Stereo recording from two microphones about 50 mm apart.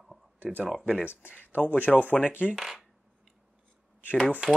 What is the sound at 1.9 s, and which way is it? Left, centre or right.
Speech, left.